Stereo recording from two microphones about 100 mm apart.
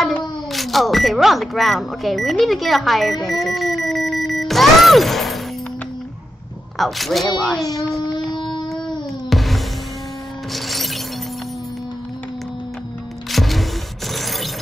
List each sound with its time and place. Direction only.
0.5 s speech: centre (ahead or behind)
6.8 s speech: centre (ahead or behind)
8.3 s a sound: 50° left (ahead or behind)
8.6 s a sound: 5° left (ahead or behind)
9.3 s music: centre (ahead or behind)
10.5 s shatter: centre (ahead or behind)
13.3 s music: centre (ahead or behind)
14.1 s shatter: centre (ahead or behind)